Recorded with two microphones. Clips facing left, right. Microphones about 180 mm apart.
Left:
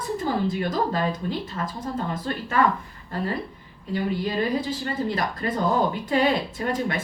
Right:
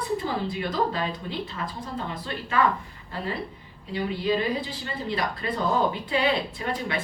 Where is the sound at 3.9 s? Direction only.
45° left (ahead or behind).